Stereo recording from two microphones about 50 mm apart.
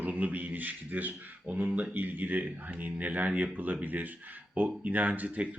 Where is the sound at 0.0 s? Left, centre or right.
Right.